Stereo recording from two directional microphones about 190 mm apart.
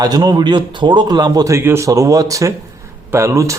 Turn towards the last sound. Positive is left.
turn(degrees=-15)  # may be behind; listen again after turning